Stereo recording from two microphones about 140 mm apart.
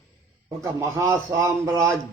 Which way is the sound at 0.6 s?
20° right (ahead or behind).